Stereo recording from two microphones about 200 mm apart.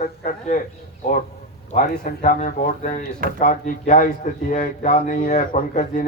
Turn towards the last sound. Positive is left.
turn(degrees=40)  # may be behind; listen again after turning